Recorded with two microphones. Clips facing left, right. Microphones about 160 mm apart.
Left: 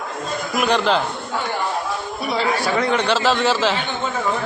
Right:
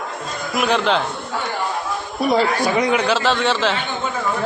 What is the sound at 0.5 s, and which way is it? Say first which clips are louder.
Speech: even; centre (ahead or behind).